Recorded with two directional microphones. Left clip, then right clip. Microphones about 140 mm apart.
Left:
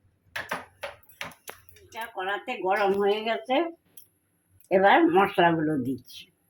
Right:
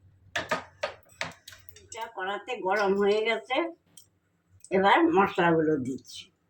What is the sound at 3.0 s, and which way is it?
Speech, 65° left (ahead or behind).